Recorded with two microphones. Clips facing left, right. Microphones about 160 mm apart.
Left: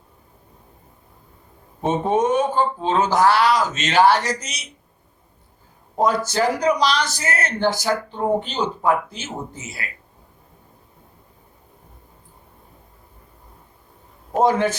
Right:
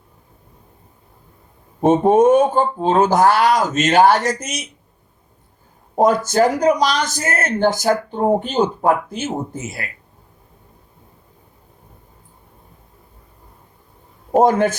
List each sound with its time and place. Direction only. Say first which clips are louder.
1.8 s speech: right 7 dB; 50° right (ahead or behind)
6.0 s speech: right 5 dB; 45° right (ahead or behind)
14.4 s speech: right 1 dB; 50° right (ahead or behind)